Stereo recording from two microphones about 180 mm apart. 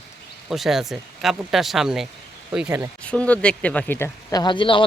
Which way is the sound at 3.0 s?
5° left (ahead or behind).